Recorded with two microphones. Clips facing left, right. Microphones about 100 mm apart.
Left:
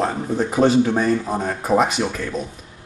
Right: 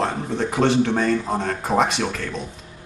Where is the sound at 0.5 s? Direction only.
15° left (ahead or behind).